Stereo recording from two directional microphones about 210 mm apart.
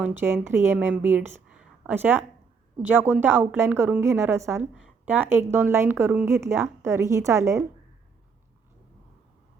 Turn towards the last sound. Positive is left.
turn(degrees=-15)  # may be behind; listen again after turning